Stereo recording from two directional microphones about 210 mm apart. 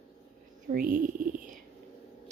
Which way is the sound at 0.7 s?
40° right (ahead or behind).